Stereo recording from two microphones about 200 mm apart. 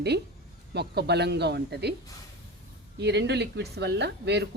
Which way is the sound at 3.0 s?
60° right (ahead or behind).